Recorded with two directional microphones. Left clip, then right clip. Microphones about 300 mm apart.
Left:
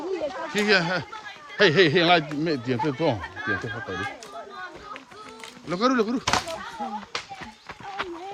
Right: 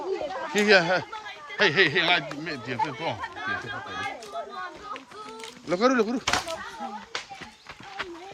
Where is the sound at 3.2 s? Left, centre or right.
Centre.